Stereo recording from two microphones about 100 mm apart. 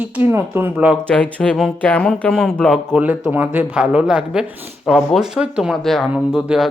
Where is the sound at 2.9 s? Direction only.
15° right (ahead or behind).